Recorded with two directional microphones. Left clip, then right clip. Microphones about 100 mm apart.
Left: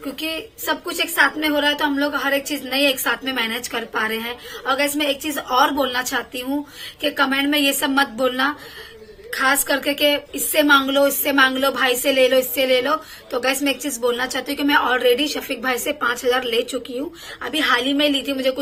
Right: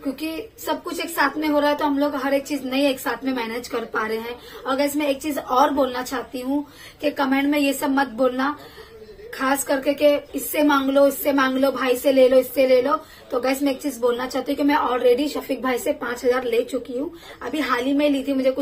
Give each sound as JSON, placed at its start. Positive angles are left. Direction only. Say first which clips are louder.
{"t": 0.0, "sound": "a woman's voice", "louder": "left 2 dB", "side_deg": -30}